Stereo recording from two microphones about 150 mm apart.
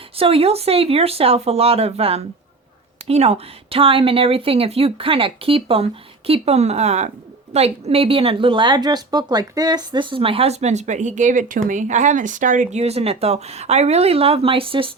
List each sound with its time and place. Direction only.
0.2 s speech: 40° right (ahead or behind)